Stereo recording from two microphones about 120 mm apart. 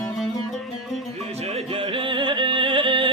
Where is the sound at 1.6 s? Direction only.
50° right (ahead or behind).